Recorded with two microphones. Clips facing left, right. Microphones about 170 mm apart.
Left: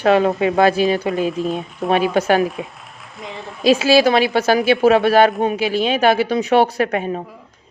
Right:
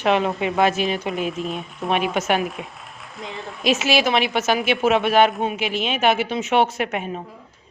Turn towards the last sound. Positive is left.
turn(degrees=35)  # may be behind; listen again after turning